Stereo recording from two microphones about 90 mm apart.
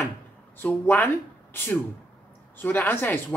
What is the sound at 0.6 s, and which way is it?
Speech, 20° left (ahead or behind).